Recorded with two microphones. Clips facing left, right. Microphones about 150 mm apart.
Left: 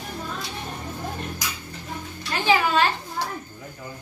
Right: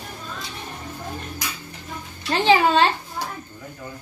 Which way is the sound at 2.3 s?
30° right (ahead or behind).